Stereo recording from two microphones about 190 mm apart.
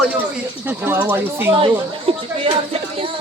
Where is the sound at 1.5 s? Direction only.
30° right (ahead or behind).